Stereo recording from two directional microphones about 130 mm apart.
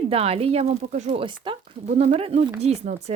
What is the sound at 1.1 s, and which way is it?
Speech, 45° right (ahead or behind).